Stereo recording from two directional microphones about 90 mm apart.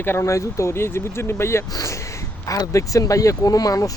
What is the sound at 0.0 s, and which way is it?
Speech, 30° left (ahead or behind).